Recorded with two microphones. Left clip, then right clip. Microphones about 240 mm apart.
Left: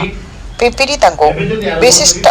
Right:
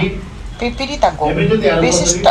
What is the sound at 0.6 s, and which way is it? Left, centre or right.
Speech, left.